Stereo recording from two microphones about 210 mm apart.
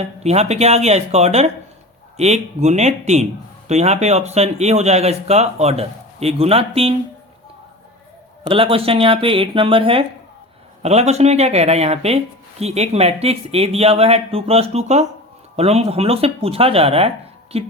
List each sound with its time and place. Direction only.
0.2 s speech: 30° right (ahead or behind)
8.4 s speech: 25° right (ahead or behind)